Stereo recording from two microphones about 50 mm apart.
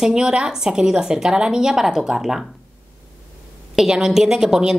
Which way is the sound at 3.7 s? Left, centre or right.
Centre.